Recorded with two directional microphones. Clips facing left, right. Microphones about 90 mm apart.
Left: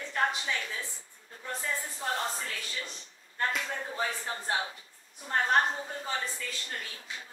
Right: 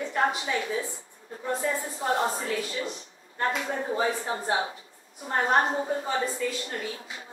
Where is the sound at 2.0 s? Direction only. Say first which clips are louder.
Right 7 dB; 20° right (ahead or behind).